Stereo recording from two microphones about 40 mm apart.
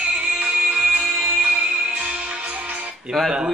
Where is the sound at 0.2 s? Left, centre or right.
Right.